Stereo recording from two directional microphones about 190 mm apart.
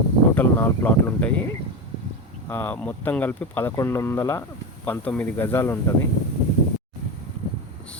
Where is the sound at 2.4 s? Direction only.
10° left (ahead or behind).